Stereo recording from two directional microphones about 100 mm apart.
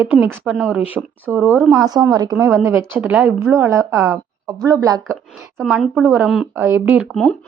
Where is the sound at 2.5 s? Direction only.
25° right (ahead or behind).